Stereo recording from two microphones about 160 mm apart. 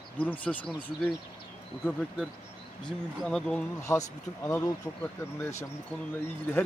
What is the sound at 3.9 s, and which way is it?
Speech, 20° left (ahead or behind).